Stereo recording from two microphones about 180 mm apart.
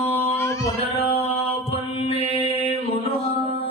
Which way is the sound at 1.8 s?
30° left (ahead or behind).